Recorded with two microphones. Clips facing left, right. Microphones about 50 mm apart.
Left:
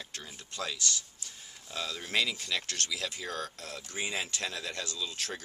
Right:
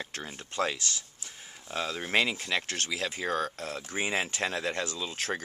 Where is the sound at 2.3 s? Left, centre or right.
Right.